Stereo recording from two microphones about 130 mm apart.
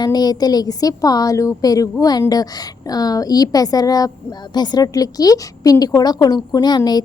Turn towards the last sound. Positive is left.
turn(degrees=30)  # may be behind; listen again after turning